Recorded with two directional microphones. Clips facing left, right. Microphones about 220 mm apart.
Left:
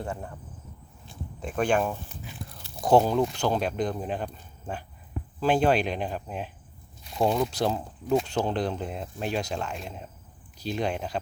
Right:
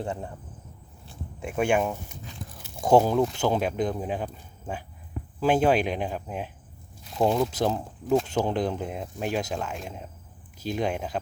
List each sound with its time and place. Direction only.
0.0 s speech: 20° right (ahead or behind)
1.4 s biting: 10° right (ahead or behind)
2.9 s speech: 5° right (ahead or behind)
7.0 s crumpling: centre (ahead or behind)
7.7 s speech: centre (ahead or behind)